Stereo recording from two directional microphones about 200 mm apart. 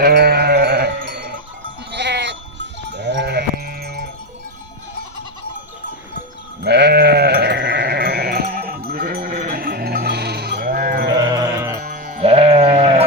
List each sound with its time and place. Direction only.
0.0 s sheep: 50° right (ahead or behind)
6.6 s sheep: 55° right (ahead or behind)
11.1 s sheep: 20° right (ahead or behind)
11.8 s music: 40° right (ahead or behind)
12.2 s sheep: 30° right (ahead or behind)